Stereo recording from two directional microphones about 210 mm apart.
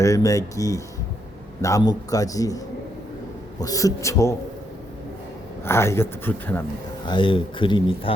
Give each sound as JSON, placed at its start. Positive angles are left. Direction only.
{"t": 0.0, "sound": "speech", "side_deg": 15}
{"t": 3.6, "sound": "speech", "side_deg": 15}
{"t": 5.6, "sound": "speech", "side_deg": 15}
{"t": 7.0, "sound": "speech", "side_deg": 25}